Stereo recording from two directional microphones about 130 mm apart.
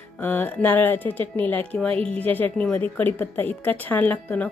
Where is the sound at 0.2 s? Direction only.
15° left (ahead or behind).